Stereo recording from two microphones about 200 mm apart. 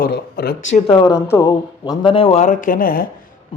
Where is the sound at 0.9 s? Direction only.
25° left (ahead or behind); by 3.1 s 45° left (ahead or behind).